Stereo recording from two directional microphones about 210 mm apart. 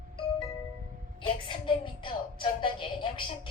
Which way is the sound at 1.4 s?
25° left (ahead or behind).